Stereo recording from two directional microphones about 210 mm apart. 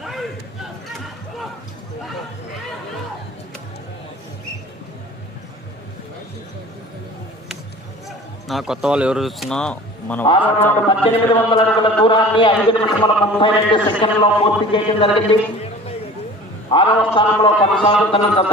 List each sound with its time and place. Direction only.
0.0 s a sound: centre (ahead or behind)
8.4 s speech: centre (ahead or behind)
10.8 s a man's voice: 20° left (ahead or behind)
16.6 s a man's voice: 25° left (ahead or behind)